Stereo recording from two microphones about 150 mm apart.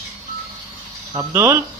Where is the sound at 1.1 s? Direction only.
20° right (ahead or behind).